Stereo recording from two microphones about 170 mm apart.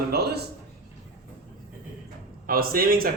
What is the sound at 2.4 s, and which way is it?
Speech, 60° right (ahead or behind).